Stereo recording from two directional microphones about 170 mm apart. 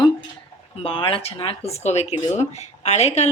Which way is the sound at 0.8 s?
30° left (ahead or behind).